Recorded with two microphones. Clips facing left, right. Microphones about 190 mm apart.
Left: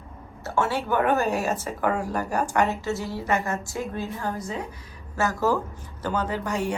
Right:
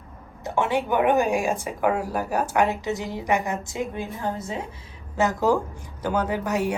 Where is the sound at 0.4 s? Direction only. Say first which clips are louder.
Right 2 dB; 15° right (ahead or behind).